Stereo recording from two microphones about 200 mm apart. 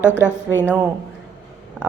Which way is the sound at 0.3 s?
10° left (ahead or behind).